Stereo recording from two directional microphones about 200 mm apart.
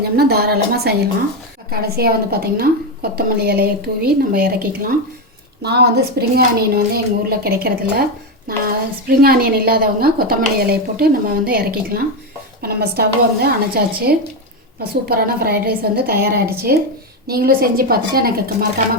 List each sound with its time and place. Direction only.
0.0 s a woman's voice: 50° right (ahead or behind)